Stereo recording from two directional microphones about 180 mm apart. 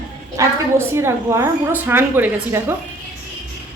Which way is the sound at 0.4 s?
20° right (ahead or behind).